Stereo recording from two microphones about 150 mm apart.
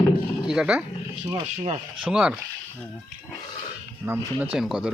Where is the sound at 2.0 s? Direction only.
5° right (ahead or behind).